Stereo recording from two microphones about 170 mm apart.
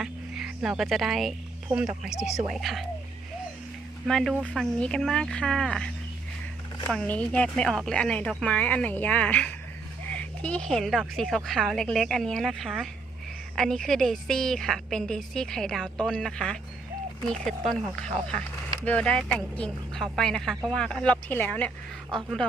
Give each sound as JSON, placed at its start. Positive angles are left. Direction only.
{"t": 0.0, "sound": "cricket", "side_deg": -5}
{"t": 2.0, "sound": "a woman's voice", "side_deg": -5}
{"t": 4.0, "sound": "a woman's voice", "side_deg": 0}
{"t": 17.7, "sound": "a woman's voice", "side_deg": 5}